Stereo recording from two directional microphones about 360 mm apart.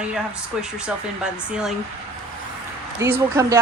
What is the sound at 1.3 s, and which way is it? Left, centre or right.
Speech, centre.